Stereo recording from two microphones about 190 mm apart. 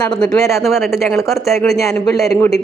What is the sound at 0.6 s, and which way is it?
Speech, centre (ahead or behind).